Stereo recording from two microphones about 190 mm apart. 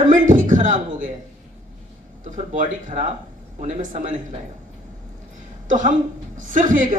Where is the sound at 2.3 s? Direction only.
40° right (ahead or behind).